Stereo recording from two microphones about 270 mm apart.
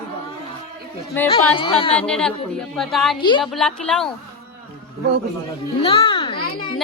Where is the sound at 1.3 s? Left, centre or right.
Centre.